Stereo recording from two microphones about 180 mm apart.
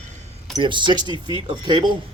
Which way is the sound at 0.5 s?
25° right (ahead or behind).